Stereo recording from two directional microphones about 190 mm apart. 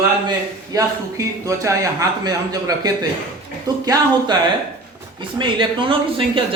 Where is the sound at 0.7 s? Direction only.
15° right (ahead or behind).